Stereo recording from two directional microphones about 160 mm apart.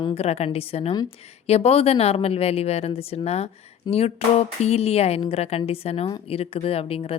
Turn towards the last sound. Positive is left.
turn(degrees=35)  # may be behind; listen again after turning